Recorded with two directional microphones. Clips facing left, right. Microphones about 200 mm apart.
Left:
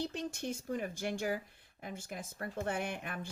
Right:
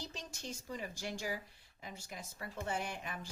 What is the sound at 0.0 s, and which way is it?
Speech, 55° left (ahead or behind).